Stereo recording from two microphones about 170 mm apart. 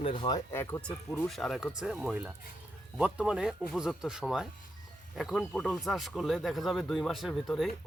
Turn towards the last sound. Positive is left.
turn(degrees=0)  # may be behind; listen again after turning